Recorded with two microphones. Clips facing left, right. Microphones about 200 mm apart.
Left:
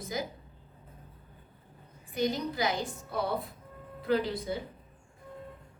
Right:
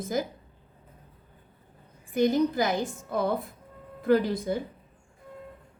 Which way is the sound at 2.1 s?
50° right (ahead or behind).